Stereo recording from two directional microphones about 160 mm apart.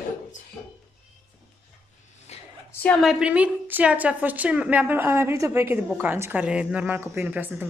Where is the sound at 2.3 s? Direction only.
45° left (ahead or behind).